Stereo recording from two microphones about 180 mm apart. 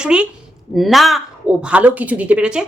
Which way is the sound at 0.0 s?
5° right (ahead or behind).